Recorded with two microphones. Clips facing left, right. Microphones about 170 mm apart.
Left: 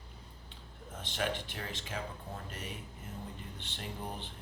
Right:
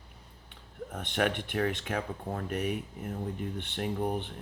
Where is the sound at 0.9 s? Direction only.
60° right (ahead or behind).